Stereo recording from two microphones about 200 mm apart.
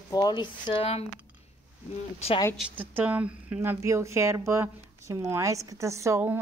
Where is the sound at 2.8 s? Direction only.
10° right (ahead or behind).